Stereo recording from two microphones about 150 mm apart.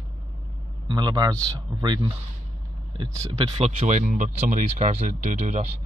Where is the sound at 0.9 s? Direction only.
25° right (ahead or behind).